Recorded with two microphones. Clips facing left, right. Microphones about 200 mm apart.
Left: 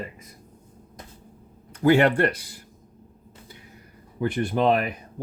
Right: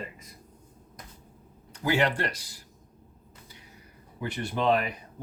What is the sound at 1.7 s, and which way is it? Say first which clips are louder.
Speech: left 8 dB; 55° left (ahead or behind).